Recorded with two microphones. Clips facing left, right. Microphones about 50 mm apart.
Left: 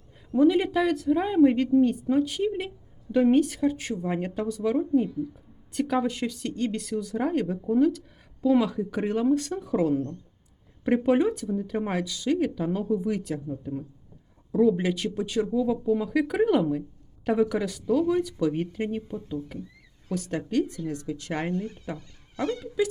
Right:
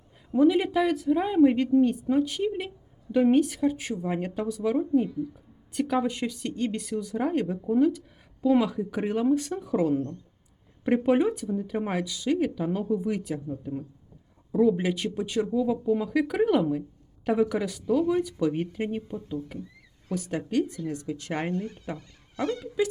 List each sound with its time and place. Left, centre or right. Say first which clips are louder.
0.3 s a woman's voice: even; centre
10.8 s speech: even; centre
13.0 s speech: left 1 dB; right
13.2 s a woman's voice: left 1 dB; centre
18.2 s speech: even; right
21.6 s speech: even; centre
22.8 s speech: left 1 dB; right